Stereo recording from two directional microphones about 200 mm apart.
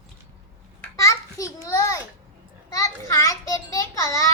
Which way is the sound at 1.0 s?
15° left (ahead or behind).